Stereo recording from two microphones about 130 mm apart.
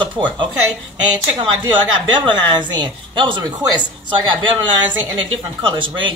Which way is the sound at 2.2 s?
35° right (ahead or behind).